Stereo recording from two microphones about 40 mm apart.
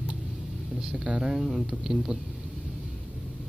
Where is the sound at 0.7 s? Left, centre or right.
Centre.